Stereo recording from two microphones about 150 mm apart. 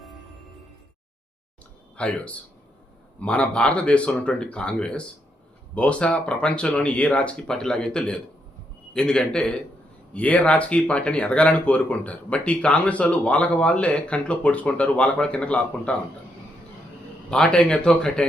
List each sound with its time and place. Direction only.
2.0 s speech: 10° left (ahead or behind)
17.3 s speech: 5° left (ahead or behind)